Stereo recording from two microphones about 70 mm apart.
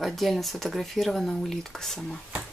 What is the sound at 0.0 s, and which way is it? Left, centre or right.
Speech, centre.